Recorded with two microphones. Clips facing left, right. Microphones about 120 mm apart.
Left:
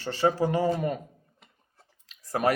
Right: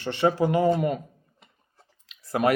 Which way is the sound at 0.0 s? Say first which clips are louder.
Right 2 dB; 30° left (ahead or behind).